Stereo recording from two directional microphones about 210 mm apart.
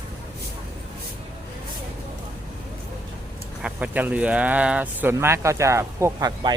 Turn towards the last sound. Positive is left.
turn(degrees=-15)  # may be behind; listen again after turning